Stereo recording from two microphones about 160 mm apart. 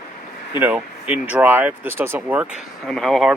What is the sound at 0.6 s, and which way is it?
Speech, 10° right (ahead or behind).